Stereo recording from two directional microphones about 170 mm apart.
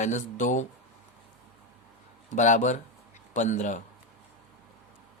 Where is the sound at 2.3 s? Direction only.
45° left (ahead or behind).